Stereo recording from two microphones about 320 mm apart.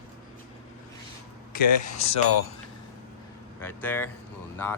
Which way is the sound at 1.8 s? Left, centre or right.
Left.